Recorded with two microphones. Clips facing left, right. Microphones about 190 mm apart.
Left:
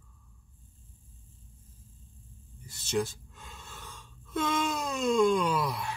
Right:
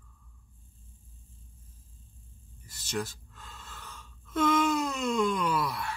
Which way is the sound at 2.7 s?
15° left (ahead or behind).